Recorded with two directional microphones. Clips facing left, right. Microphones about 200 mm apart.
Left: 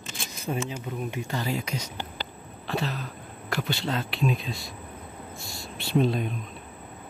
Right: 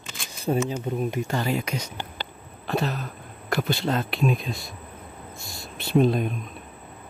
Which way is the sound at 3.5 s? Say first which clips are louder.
Right 4 dB; 40° right (ahead or behind).